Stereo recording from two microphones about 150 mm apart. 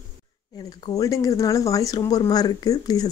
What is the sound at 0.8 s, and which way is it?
Speech, 25° left (ahead or behind).